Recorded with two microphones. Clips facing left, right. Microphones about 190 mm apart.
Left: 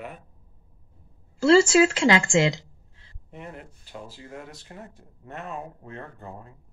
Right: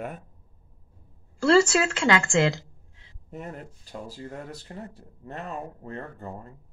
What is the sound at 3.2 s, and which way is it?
Speech, 40° right (ahead or behind).